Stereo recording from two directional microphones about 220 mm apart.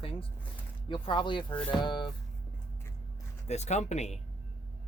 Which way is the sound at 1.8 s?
20° left (ahead or behind).